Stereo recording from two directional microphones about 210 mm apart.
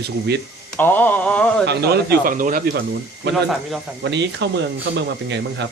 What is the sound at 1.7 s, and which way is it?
Speech, 50° right (ahead or behind).